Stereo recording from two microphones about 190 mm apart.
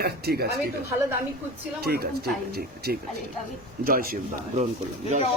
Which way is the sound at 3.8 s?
50° right (ahead or behind).